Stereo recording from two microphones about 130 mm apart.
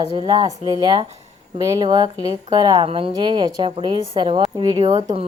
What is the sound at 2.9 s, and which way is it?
Speech, 45° right (ahead or behind).